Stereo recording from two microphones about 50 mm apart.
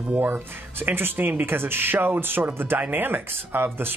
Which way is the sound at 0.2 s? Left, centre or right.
Right.